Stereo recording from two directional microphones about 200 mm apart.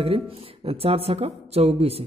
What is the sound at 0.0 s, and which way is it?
Speech, 30° right (ahead or behind).